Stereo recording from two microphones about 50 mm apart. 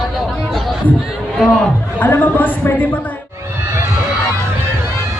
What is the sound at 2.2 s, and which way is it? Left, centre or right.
Speech, left.